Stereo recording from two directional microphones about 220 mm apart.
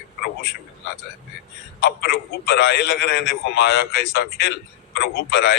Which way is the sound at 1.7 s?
45° left (ahead or behind).